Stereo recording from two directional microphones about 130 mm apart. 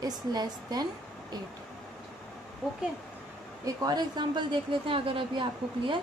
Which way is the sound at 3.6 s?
30° right (ahead or behind).